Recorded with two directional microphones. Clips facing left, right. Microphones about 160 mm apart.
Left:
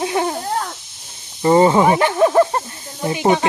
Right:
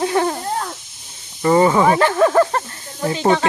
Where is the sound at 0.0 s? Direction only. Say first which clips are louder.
Right 2 dB; 15° left (ahead or behind).